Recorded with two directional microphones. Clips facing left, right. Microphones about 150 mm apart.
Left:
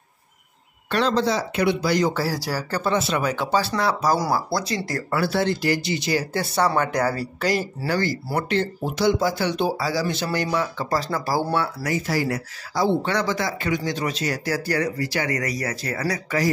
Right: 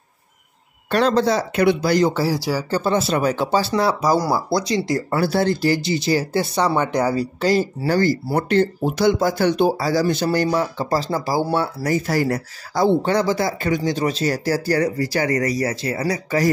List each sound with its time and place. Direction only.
0.9 s speech: 50° right (ahead or behind)
2.0 s speech: 25° right (ahead or behind)
4.5 s speech: 20° right (ahead or behind)
5.2 s speech: 40° right (ahead or behind)
6.5 s speech: 20° right (ahead or behind)
7.9 s speech: 45° right (ahead or behind)
11.2 s speech: 15° right (ahead or behind)
11.5 s speech: 30° right (ahead or behind)
12.1 s speech: 50° right (ahead or behind)
13.1 s speech: 35° right (ahead or behind)